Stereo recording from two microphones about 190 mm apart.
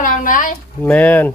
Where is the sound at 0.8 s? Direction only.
10° left (ahead or behind).